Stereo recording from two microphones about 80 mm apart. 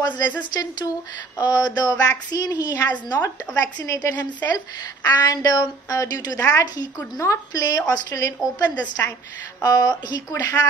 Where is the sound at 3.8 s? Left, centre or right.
Left.